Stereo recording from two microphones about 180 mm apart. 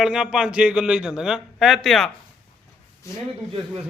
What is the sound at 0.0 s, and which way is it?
A man's voice, 5° right (ahead or behind).